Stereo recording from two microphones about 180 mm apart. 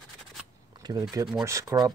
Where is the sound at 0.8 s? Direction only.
20° right (ahead or behind).